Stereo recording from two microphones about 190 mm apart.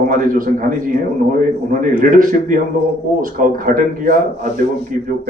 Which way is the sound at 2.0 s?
45° right (ahead or behind).